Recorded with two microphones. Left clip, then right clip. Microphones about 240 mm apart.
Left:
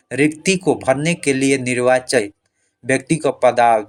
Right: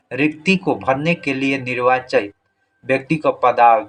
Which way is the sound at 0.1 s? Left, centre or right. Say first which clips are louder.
Left 1 dB; left.